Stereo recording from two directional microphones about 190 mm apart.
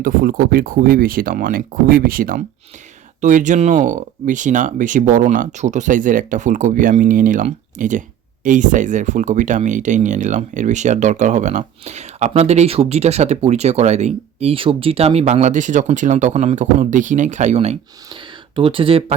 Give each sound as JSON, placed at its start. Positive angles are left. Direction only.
{"t": 0.0, "sound": "speech", "side_deg": -45}